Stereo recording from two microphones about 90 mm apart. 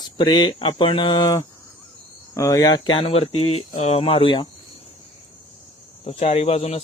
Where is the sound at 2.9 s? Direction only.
90° left.